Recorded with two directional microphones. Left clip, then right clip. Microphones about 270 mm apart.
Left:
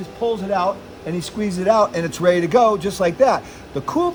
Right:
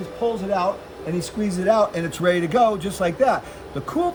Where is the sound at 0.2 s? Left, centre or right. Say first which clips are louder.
Left 2 dB; centre.